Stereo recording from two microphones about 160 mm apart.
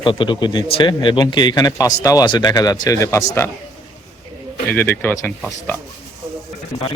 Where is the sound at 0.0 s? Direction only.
30° left (ahead or behind).